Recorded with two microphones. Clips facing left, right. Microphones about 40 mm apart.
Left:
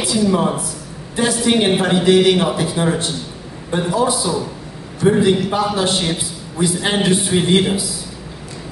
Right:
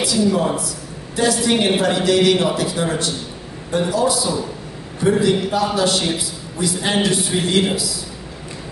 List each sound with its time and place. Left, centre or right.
0.0 s a man's voice: left